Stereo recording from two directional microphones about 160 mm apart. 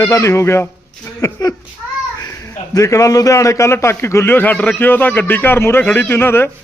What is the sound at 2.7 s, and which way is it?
A man's voice, 20° left (ahead or behind).